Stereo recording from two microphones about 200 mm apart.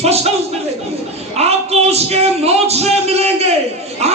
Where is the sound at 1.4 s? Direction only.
30° right (ahead or behind).